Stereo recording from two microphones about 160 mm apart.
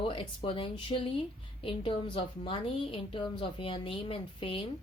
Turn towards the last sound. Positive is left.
turn(degrees=35)  # may be behind; listen again after turning